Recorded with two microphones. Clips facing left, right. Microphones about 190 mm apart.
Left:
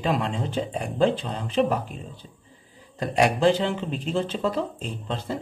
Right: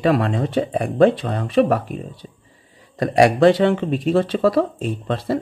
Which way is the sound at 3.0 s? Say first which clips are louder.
Right 7 dB; 85° right.